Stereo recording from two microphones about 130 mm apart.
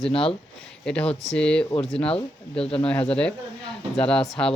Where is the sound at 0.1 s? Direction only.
45° left (ahead or behind).